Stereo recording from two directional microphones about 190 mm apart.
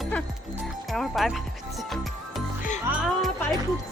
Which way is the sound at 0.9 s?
Centre (ahead or behind).